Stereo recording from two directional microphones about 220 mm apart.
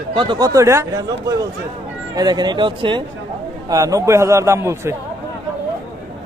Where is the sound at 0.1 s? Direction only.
20° right (ahead or behind).